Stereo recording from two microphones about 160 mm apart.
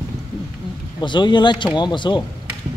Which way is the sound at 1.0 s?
30° left (ahead or behind).